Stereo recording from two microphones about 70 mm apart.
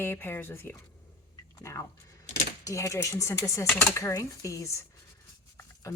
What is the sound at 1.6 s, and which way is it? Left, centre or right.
Speech, left.